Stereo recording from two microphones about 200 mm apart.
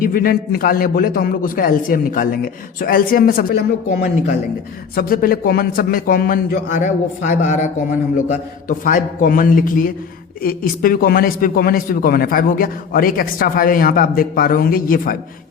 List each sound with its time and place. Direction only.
0.0 s a man's voice: 45° left (ahead or behind)
4.9 s a man's voice: 45° left (ahead or behind)